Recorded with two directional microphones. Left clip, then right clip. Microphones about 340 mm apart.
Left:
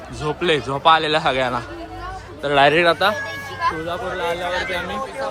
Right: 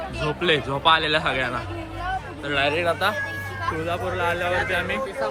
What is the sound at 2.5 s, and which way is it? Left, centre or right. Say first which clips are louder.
Speech: left 8 dB; left.